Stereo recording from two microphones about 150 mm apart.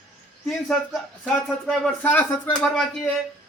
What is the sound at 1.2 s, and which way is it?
Speech, 5° left (ahead or behind).